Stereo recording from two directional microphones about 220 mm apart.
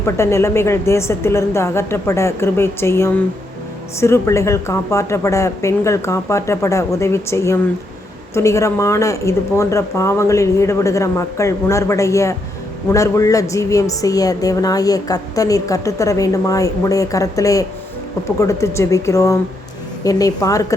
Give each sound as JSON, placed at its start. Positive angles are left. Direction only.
{"t": 0.0, "sound": "a woman's voice", "side_deg": 10}